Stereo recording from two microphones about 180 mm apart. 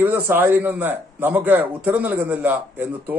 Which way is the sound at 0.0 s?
10° right (ahead or behind).